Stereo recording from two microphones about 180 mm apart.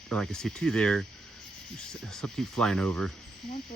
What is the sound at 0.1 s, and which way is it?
Speech, 5° left (ahead or behind).